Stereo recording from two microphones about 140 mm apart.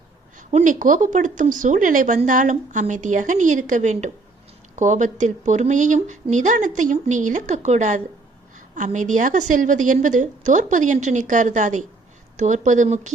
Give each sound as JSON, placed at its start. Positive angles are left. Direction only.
{"t": 0.3, "sound": "speech", "side_deg": -65}